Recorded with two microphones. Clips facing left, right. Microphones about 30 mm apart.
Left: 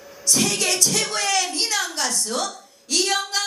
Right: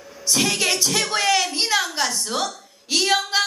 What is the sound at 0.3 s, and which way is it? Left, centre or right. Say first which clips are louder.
Music: right 1 dB; centre.